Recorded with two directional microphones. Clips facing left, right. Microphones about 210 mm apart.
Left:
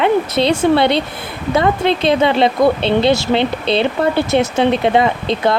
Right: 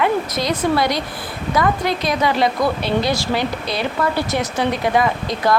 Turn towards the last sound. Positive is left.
turn(degrees=25)  # may be behind; listen again after turning